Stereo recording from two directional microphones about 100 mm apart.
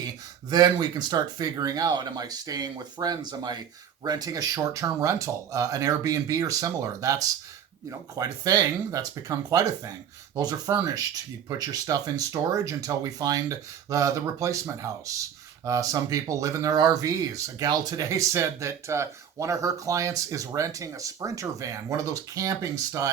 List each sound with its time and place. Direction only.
0.5 s speech: 45° right (ahead or behind)